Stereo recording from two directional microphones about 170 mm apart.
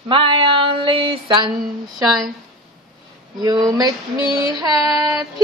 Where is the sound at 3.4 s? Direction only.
20° right (ahead or behind).